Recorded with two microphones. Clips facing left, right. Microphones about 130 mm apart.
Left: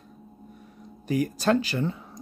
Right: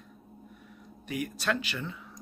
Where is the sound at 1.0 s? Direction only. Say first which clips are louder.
Left 8 dB; 35° left (ahead or behind).